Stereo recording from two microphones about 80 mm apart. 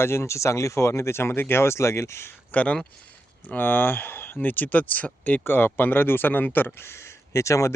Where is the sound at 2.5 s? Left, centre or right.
Centre.